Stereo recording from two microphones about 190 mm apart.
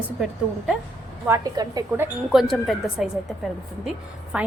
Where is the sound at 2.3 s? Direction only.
Centre (ahead or behind).